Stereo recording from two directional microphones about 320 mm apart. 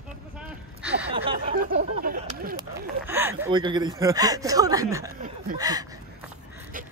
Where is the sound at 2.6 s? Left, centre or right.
Centre.